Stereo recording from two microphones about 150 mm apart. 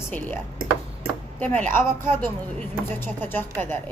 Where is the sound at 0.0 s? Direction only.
15° left (ahead or behind).